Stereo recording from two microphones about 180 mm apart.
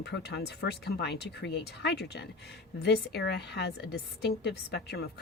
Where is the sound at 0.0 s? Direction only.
70° left (ahead or behind).